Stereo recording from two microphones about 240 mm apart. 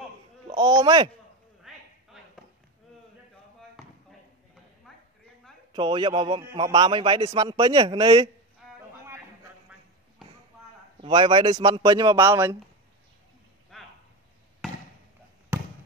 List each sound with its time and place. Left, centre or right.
0.6 s speech: centre
1.7 s a sound: centre
5.7 s speech: centre
9.7 s basketball bounce: centre
11.0 s speech: right
13.7 s a sound: centre
15.5 s basketball bounce: centre